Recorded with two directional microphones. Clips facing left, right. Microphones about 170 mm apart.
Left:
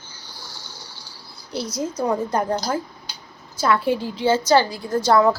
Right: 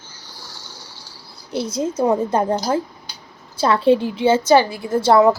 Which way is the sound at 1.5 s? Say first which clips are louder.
Right 4 dB; 25° right (ahead or behind).